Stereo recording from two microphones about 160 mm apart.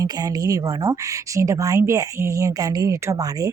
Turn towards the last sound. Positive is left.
turn(degrees=-20)  # may be behind; listen again after turning